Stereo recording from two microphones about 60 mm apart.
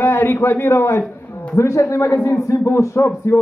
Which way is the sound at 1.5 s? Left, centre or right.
Left.